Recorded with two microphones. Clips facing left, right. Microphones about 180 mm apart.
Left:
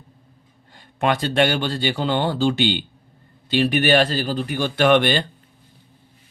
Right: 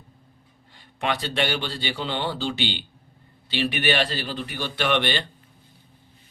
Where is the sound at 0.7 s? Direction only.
50° left (ahead or behind).